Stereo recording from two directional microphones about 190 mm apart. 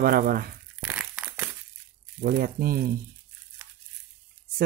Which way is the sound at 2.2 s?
55° right (ahead or behind).